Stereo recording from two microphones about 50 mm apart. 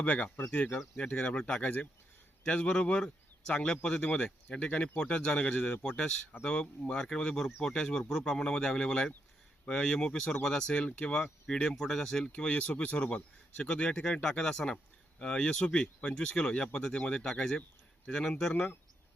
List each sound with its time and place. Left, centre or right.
0.0 s a man's voice: left; by 12.3 s centre
12.4 s speech: left